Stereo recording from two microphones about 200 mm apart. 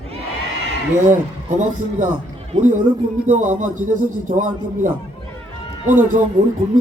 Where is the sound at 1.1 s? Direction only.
40° right (ahead or behind).